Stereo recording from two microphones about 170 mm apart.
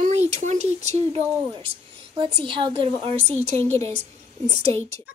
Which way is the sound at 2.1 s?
30° right (ahead or behind).